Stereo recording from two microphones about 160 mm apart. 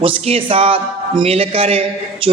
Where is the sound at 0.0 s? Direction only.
35° right (ahead or behind).